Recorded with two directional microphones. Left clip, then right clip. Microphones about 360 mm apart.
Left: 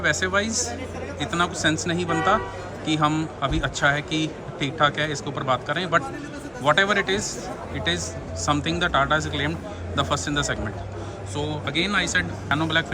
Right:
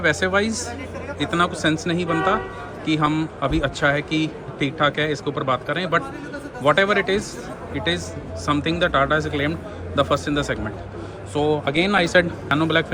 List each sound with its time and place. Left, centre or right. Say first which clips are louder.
0.0 s speech: right 3 dB; centre